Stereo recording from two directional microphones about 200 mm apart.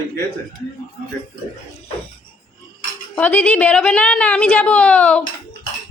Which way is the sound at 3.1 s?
10° left (ahead or behind).